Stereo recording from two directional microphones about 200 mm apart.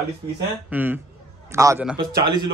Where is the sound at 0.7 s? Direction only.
10° right (ahead or behind).